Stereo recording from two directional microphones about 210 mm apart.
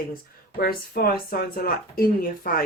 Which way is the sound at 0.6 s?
45° left (ahead or behind).